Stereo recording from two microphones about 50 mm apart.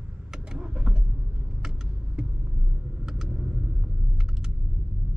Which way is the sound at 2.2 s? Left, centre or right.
Centre.